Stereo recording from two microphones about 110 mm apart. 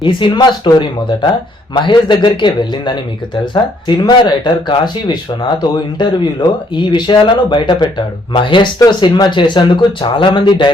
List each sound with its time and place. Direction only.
0.0 s speech: 45° left (ahead or behind)